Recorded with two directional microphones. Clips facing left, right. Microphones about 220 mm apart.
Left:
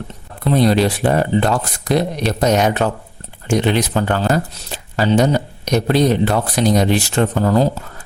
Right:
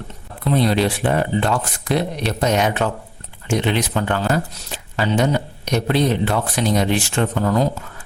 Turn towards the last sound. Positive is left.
turn(degrees=35)  # may be behind; listen again after turning